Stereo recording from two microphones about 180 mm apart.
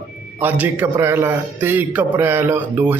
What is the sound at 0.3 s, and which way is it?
A man's voice, 10° right (ahead or behind).